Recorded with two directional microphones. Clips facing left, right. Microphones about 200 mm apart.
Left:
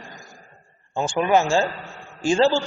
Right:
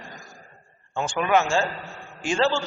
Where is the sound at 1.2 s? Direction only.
30° left (ahead or behind).